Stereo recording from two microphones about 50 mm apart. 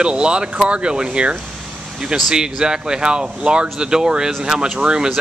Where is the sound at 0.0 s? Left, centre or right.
Centre.